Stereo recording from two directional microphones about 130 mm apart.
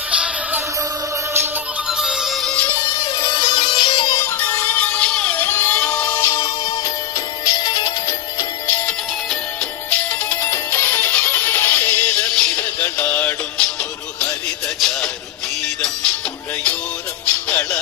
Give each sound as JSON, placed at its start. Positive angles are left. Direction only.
{"t": 0.1, "sound": "music", "side_deg": -10}
{"t": 1.9, "sound": "music", "side_deg": -5}
{"t": 3.0, "sound": "music", "side_deg": 25}
{"t": 3.4, "sound": "music", "side_deg": 35}
{"t": 4.2, "sound": "music", "side_deg": 20}
{"t": 9.8, "sound": "music", "side_deg": 15}
{"t": 14.8, "sound": "music", "side_deg": 5}
{"t": 17.5, "sound": "music", "side_deg": 15}